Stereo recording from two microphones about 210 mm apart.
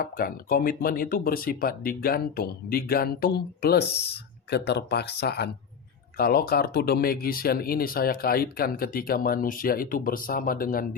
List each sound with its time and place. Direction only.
0.0 s speech: 45° left (ahead or behind)